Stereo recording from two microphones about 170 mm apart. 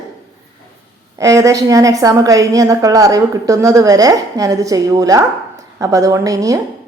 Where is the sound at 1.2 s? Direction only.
20° right (ahead or behind).